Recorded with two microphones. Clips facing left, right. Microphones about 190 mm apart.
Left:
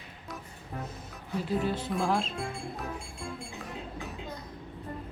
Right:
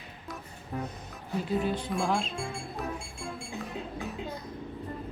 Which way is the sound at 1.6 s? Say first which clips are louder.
Even; centre (ahead or behind).